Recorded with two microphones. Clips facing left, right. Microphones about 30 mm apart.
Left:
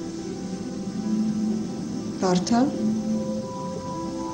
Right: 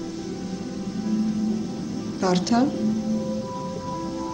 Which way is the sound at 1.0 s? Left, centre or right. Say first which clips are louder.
Right 1 dB; centre.